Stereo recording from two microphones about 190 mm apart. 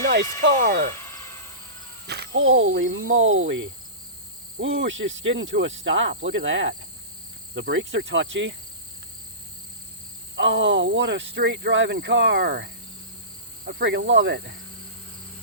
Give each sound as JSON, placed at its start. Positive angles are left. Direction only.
{"t": 0.0, "sound": "a sound", "side_deg": -60}
{"t": 0.5, "sound": "speech", "side_deg": -50}
{"t": 2.0, "sound": "speech", "side_deg": -60}
{"t": 2.9, "sound": "snake", "side_deg": -90}
{"t": 4.6, "sound": "cricket", "side_deg": -85}
{"t": 10.3, "sound": "speech", "side_deg": -75}